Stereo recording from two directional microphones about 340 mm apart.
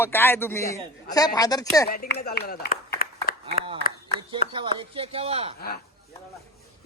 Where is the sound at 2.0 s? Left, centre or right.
Left.